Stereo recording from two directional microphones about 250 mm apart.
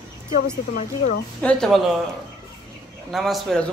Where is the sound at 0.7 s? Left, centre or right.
Left.